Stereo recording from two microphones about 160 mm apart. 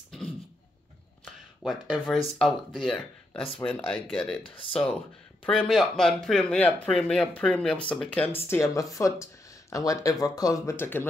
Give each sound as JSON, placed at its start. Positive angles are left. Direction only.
{"t": 1.2, "sound": "a sound", "side_deg": 0}
{"t": 2.3, "sound": "speech", "side_deg": 0}
{"t": 8.5, "sound": "speech", "side_deg": 20}